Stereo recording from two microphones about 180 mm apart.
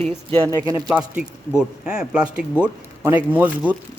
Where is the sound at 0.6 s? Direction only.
10° right (ahead or behind).